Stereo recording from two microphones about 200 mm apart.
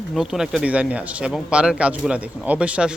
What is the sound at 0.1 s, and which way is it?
Speech, centre (ahead or behind).